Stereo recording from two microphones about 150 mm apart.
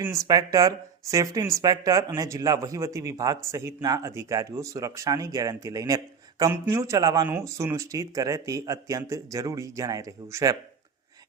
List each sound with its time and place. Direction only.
0.0 s speech: 20° right (ahead or behind)